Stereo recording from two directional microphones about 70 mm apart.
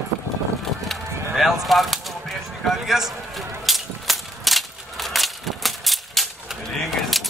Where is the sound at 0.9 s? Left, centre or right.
Centre.